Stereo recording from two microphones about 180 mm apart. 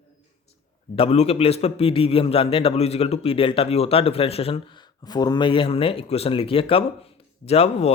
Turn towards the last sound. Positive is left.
turn(degrees=35)  # may be behind; listen again after turning